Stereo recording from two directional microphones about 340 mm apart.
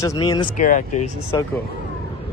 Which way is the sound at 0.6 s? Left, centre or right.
Left.